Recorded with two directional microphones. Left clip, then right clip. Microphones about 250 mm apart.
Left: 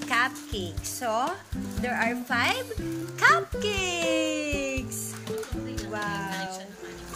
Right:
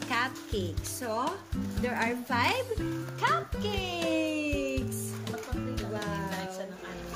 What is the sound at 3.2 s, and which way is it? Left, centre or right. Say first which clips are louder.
Speech: left 8 dB; centre.